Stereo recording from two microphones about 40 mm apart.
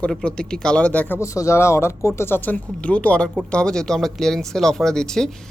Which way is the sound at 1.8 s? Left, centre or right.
Left.